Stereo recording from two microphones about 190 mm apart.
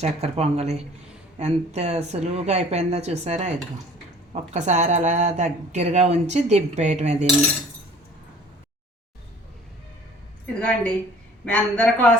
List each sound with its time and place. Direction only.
0.0 s speech: 35° right (ahead or behind)
10.4 s a man's voice: 5° left (ahead or behind)